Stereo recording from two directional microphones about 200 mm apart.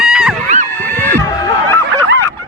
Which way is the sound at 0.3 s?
35° right (ahead or behind).